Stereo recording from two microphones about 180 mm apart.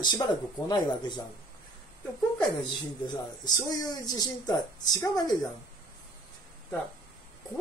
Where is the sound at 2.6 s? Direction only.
25° left (ahead or behind).